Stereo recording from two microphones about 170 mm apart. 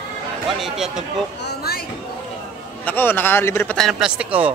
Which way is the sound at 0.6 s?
Centre (ahead or behind).